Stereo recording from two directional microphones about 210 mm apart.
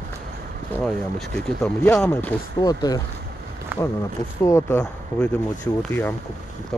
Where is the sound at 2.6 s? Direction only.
20° left (ahead or behind).